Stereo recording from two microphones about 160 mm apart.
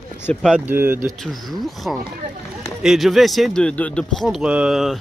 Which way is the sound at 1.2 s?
Centre (ahead or behind).